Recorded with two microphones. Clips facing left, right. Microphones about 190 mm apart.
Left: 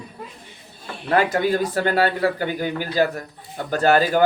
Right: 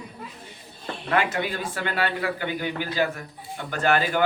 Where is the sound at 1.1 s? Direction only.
40° left (ahead or behind).